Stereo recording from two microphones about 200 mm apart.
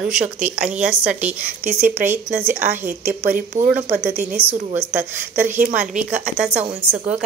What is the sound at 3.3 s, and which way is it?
Speech, 40° right (ahead or behind).